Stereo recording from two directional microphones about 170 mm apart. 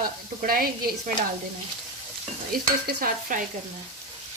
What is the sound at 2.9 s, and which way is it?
Speech, 60° right (ahead or behind).